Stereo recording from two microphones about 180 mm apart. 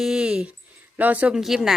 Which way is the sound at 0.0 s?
5° right (ahead or behind).